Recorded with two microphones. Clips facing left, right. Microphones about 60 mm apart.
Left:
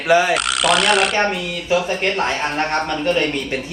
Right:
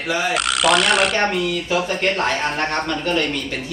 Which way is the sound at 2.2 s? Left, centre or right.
Left.